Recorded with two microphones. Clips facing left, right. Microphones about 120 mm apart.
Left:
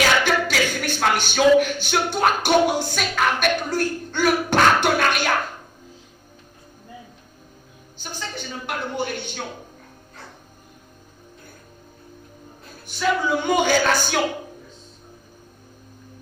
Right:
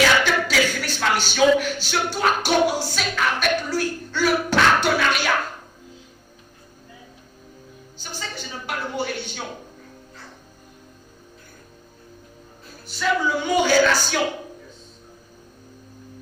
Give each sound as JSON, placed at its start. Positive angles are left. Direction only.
{"t": 0.0, "sound": "speech", "side_deg": 50}
{"t": 8.4, "sound": "a sound", "side_deg": 55}
{"t": 13.2, "sound": "a woman's voice", "side_deg": 50}